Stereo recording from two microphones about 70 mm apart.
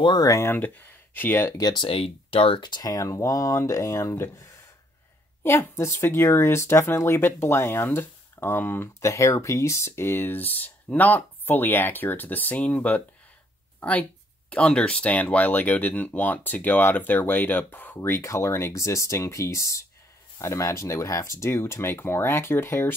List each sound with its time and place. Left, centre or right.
0.5 s speech: left
1.6 s speech: left
3.1 s speech: left
5.4 s speech: left
9.0 s speech: left
18.2 s speech: left